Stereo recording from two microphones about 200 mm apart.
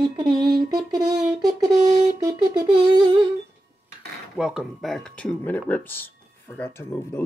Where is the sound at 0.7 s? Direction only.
20° right (ahead or behind).